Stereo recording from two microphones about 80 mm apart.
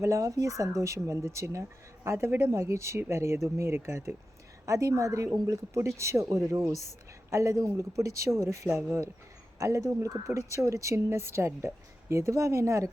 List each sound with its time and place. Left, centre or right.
0.0 s speech: right
9.6 s speech: right